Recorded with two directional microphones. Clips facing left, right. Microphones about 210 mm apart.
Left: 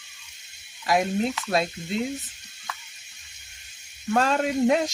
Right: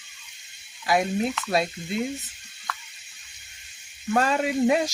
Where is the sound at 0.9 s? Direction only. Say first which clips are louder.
Even; centre (ahead or behind).